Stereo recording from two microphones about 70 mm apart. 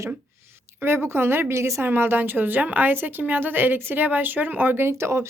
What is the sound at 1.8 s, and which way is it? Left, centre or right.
A woman's voice, right.